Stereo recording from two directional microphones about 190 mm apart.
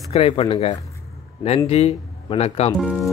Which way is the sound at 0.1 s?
30° left (ahead or behind).